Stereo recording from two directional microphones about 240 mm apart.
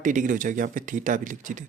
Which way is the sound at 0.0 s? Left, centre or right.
Right.